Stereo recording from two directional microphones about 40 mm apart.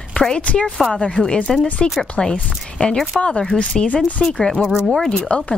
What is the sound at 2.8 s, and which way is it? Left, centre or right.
Speech, left.